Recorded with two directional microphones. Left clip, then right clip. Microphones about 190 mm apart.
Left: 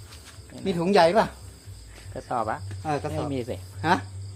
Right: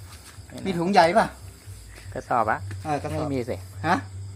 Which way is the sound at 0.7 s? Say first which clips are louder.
Right 1 dB; 35° left (ahead or behind).